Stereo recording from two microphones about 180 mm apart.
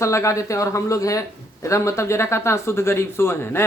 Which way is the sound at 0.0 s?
15° left (ahead or behind).